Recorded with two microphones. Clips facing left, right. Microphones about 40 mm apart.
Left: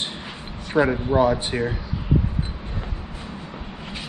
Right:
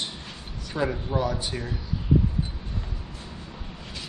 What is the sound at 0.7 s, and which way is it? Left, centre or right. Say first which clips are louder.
Speech: left 8 dB; left.